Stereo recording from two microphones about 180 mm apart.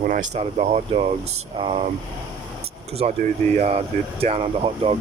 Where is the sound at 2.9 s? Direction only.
40° right (ahead or behind).